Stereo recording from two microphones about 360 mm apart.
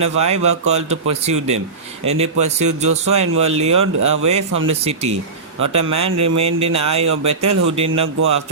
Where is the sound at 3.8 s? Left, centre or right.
Right.